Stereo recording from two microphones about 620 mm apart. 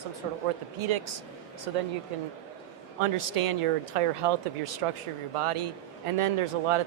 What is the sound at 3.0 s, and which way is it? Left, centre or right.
A man's voice, right.